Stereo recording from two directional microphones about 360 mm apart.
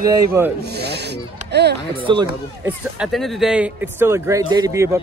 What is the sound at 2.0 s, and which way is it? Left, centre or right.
A man's voice, centre.